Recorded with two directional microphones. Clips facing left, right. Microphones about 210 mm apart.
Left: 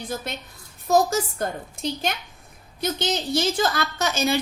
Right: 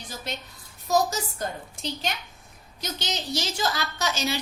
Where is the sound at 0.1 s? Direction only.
55° left (ahead or behind).